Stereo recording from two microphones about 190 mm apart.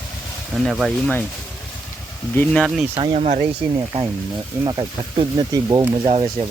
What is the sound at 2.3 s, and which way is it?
Speech, 5° left (ahead or behind).